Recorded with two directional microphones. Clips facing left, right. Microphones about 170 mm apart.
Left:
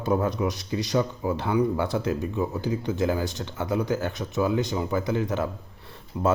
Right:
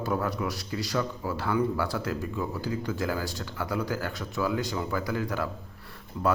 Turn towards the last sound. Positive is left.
turn(degrees=20)  # may be behind; listen again after turning